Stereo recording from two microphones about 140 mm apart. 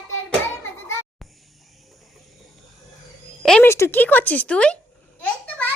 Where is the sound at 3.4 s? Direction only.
5° left (ahead or behind).